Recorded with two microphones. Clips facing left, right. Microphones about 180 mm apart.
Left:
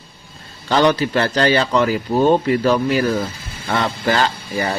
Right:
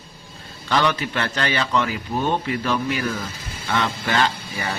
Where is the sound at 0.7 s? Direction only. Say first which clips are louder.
Left 6 dB; 35° left (ahead or behind).